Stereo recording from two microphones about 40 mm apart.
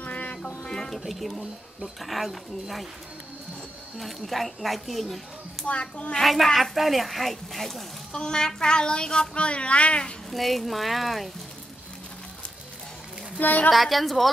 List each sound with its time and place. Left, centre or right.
0.0 s music: left
0.8 s speech: centre
4.0 s speech: centre
5.7 s a woman's voice: left
6.2 s speech: centre
8.1 s a child's voice: centre
10.3 s speech: centre
13.4 s a woman's voice: left
13.7 s speech: centre